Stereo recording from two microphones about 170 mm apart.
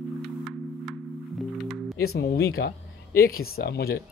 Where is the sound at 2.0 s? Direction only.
65° left (ahead or behind).